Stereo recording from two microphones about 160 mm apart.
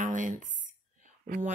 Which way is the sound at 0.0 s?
55° right (ahead or behind).